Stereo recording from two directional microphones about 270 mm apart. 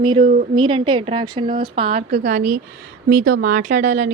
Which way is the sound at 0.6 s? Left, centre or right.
Centre.